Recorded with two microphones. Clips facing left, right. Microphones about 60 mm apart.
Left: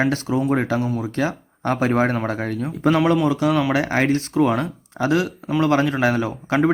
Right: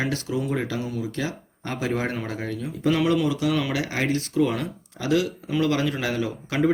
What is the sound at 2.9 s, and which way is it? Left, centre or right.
Speech, left.